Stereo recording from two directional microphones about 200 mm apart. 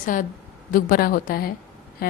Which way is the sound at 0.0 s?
40° left (ahead or behind).